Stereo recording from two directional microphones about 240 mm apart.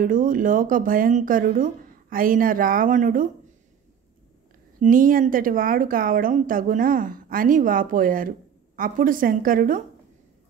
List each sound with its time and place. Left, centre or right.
0.0 s speech: right
4.7 s speech: right